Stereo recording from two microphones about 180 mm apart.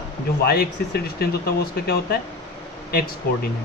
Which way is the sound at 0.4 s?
60° left (ahead or behind).